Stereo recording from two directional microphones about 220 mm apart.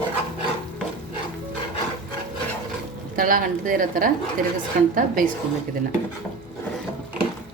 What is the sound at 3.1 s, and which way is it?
Speech, 40° right (ahead or behind).